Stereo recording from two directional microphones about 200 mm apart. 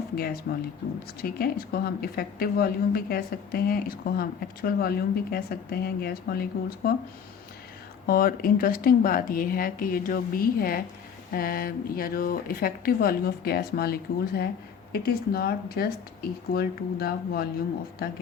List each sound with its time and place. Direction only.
0.5 s a woman's voice: 45° left (ahead or behind)
8.0 s a woman's voice: 45° left (ahead or behind)